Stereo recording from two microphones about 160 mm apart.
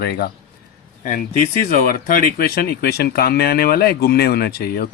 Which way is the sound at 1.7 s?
60° left (ahead or behind).